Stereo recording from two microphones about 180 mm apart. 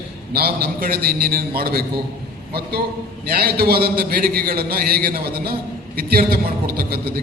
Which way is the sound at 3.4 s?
60° right (ahead or behind).